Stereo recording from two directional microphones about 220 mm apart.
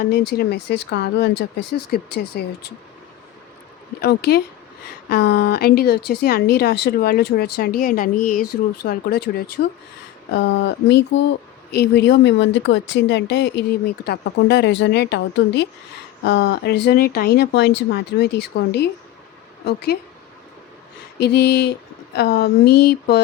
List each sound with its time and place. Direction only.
0.0 s speech: 45° left (ahead or behind)
4.0 s speech: 45° left (ahead or behind)
21.2 s speech: 50° left (ahead or behind)